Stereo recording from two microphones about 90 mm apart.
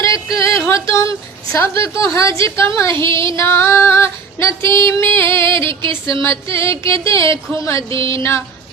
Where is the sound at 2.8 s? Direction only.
30° left (ahead or behind).